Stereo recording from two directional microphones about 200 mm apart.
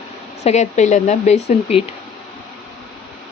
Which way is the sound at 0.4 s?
35° left (ahead or behind).